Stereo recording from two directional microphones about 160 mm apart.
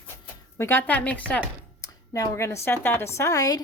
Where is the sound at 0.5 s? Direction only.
15° left (ahead or behind).